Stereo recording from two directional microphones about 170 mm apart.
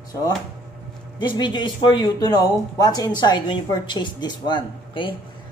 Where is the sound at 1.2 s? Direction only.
25° left (ahead or behind).